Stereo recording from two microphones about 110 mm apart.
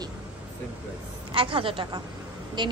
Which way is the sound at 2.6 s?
45° right (ahead or behind).